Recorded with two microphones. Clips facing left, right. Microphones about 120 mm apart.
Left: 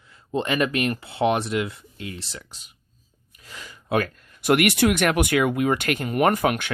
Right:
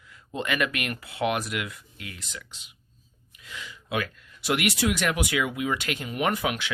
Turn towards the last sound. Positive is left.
turn(degrees=50)  # may be behind; listen again after turning